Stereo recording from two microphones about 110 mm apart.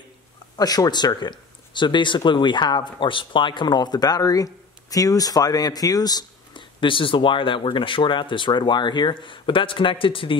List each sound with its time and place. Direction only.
0.6 s speech: 35° left (ahead or behind); by 10.3 s 50° left (ahead or behind)